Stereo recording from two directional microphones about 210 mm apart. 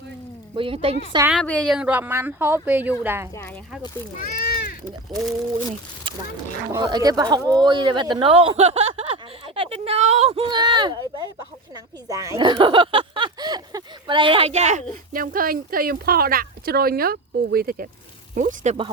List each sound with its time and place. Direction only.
0.5 s speech: 25° right (ahead or behind)
1.3 s speech: 5° left (ahead or behind)
4.2 s speech: 50° left (ahead or behind)
6.7 s speech: 20° right (ahead or behind)
9.6 s a sound: 30° right (ahead or behind)
12.0 s speech: 15° right (ahead or behind); by 18.9 s 35° right (ahead or behind)